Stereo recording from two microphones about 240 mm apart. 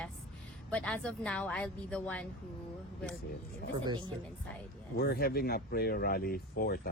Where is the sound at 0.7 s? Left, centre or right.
Centre.